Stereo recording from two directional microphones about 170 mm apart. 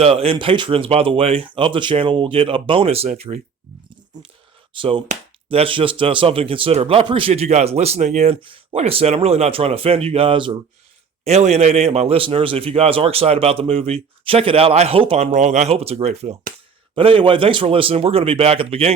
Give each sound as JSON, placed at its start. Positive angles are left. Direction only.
{"t": 0.0, "sound": "speech", "side_deg": -35}
{"t": 4.7, "sound": "speech", "side_deg": -30}
{"t": 11.2, "sound": "speech", "side_deg": -40}